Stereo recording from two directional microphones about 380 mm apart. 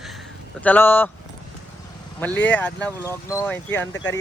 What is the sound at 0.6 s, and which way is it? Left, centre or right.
Speech, centre.